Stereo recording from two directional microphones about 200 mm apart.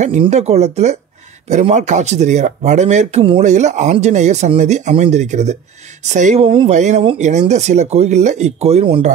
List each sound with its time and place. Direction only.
0.0 s speech: 35° right (ahead or behind)